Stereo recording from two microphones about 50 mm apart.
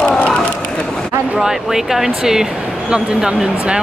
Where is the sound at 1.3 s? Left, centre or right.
Centre.